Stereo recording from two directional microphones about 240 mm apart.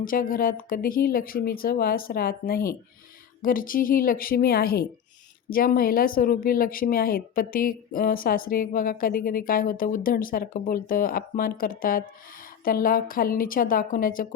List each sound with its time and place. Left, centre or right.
0.0 s speech: left